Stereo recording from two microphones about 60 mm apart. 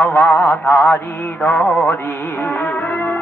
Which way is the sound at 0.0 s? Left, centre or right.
Left.